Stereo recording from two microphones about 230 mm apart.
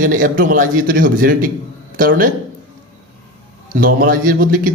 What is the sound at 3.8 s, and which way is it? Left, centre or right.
Speech, right.